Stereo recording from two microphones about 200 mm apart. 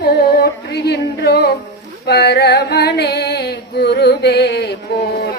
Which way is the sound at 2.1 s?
55° left (ahead or behind).